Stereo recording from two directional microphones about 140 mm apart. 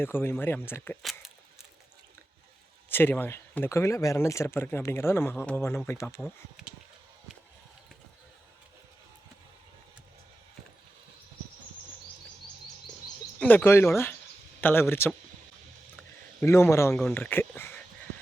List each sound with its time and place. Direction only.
0.0 s speech: 15° left (ahead or behind)
2.9 s speech: 15° left (ahead or behind)
6.6 s a sound: 5° right (ahead or behind)
13.4 s speech: 10° left (ahead or behind)
16.4 s a man's voice: 20° left (ahead or behind)